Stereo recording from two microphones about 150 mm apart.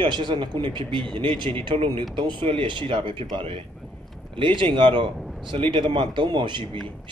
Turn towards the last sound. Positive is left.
turn(degrees=-30)  # may be behind; listen again after turning